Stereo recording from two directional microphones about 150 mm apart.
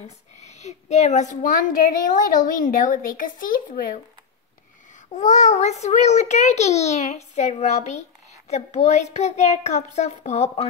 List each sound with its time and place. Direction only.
0.4 s a woman's voice: 50° left (ahead or behind); by 4.0 s 70° left (ahead or behind)
5.1 s a child's voice: 50° left (ahead or behind)